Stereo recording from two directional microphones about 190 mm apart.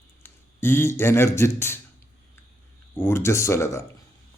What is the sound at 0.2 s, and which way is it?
A man's voice, 10° left (ahead or behind).